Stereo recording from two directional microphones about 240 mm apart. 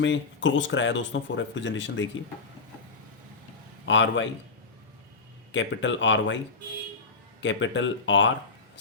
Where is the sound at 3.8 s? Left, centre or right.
Left.